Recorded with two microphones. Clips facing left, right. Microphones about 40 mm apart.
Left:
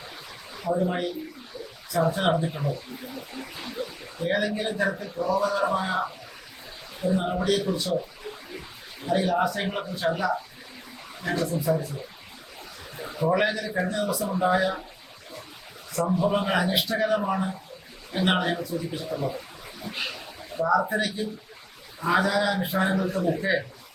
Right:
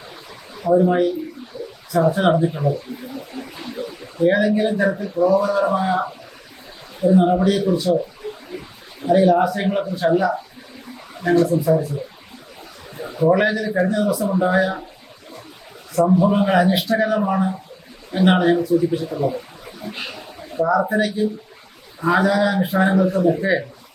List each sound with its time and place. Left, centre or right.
0.7 s speech: centre
1.9 s speech: centre
8.5 s a sound: centre
9.0 s speech: centre
13.0 s speech: centre
16.1 s speech: centre
19.8 s a sound: centre
20.6 s speech: centre